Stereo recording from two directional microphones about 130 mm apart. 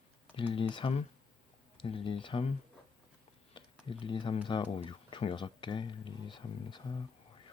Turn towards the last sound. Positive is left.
turn(degrees=35)  # may be behind; listen again after turning